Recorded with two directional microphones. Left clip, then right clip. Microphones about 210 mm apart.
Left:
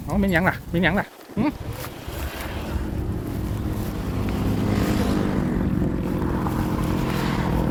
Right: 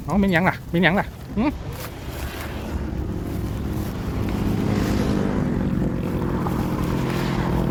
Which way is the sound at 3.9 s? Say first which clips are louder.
Even; 50° left (ahead or behind).